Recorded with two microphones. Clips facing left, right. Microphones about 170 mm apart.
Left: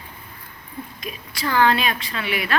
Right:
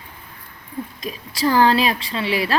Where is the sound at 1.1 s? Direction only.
35° right (ahead or behind).